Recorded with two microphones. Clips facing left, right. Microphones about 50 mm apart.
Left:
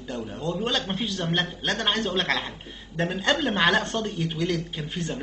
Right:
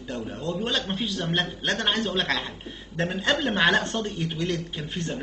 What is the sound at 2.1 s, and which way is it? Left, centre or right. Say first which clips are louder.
Speech: left 1 dB; left.